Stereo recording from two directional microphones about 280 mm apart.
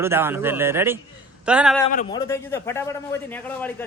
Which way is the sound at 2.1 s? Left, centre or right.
Centre.